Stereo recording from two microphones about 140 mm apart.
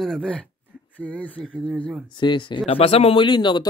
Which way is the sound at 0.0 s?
5° left (ahead or behind).